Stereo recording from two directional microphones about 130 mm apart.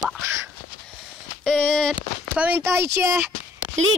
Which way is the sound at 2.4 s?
15° right (ahead or behind).